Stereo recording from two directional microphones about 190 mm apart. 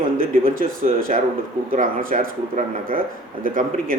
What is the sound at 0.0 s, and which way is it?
Speech, 45° right (ahead or behind).